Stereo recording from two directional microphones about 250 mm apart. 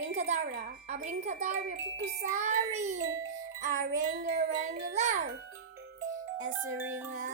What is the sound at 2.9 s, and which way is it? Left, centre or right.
Speech, right.